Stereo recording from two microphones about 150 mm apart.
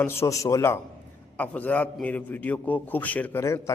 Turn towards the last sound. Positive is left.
turn(degrees=20)  # may be behind; listen again after turning